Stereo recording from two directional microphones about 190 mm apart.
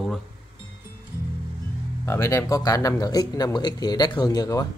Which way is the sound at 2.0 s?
15° left (ahead or behind).